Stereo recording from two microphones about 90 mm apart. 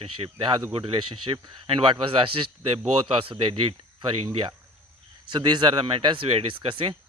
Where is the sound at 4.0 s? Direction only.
60° right (ahead or behind).